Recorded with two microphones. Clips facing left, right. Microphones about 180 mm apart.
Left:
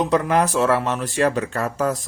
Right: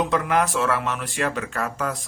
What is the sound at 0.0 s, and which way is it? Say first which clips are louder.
A man's voice: left 3 dB; 35° left (ahead or behind).